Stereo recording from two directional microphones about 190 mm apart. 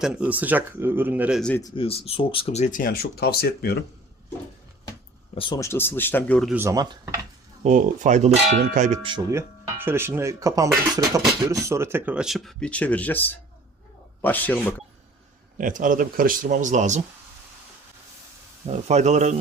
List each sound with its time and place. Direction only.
0.0 s speech: 5° right (ahead or behind)
1.4 s speech: 5° left (ahead or behind)
1.6 s speech: 30° left (ahead or behind)
2.8 s speech: 55° left (ahead or behind)
5.3 s speech: 30° left (ahead or behind)
5.5 s speech: 15° left (ahead or behind)
6.5 s speech: 15° right (ahead or behind)
7.6 s a sound: 40° right (ahead or behind)
9.3 s speech: 10° right (ahead or behind); by 14.6 s 10° left (ahead or behind)
15.5 s speech: 45° right (ahead or behind)
18.7 s a sound: 35° right (ahead or behind)